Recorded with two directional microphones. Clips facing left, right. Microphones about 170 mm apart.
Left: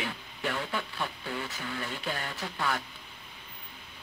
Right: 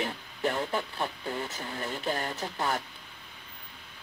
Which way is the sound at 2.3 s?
25° right (ahead or behind).